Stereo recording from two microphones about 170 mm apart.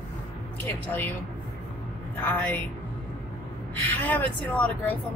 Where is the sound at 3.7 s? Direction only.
10° left (ahead or behind).